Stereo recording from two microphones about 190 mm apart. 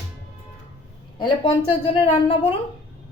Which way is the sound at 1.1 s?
25° left (ahead or behind).